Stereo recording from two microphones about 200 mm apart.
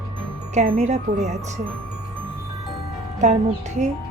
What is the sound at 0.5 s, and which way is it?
Speech, 35° right (ahead or behind).